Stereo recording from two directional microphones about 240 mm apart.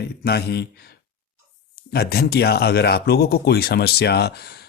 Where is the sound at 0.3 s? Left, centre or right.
Left.